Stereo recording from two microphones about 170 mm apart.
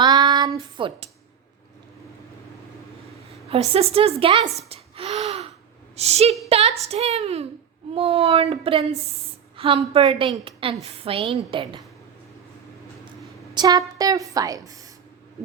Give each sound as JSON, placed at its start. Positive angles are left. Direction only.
{"t": 0.0, "sound": "a sound", "side_deg": -25}
{"t": 3.5, "sound": "a woman's voice", "side_deg": -35}
{"t": 13.5, "sound": "a woman's voice", "side_deg": -25}